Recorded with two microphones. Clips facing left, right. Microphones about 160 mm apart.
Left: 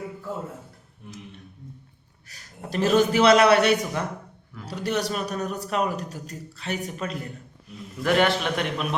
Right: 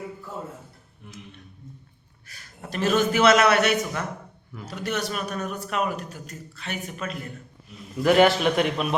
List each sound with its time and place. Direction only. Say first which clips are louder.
2.6 s a man's voice: left 2 dB; 35° left (ahead or behind)
8.0 s a man's voice: right 4 dB; 5° right (ahead or behind)